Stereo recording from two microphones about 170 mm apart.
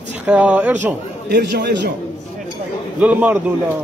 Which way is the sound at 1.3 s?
75° right (ahead or behind).